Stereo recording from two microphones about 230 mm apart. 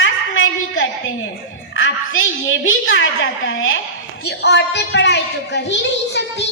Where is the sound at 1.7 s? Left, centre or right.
Left.